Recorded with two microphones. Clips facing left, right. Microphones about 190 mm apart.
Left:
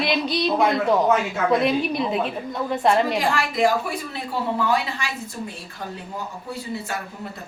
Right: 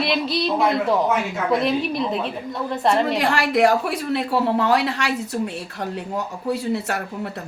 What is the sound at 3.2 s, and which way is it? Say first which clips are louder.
Speech: right 3 dB; 70° right (ahead or behind).